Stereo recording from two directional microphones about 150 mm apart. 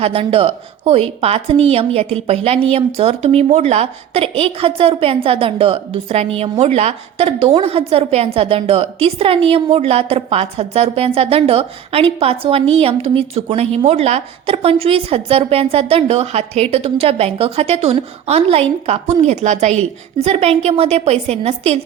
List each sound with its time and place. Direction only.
0.0 s a woman's voice: 40° right (ahead or behind)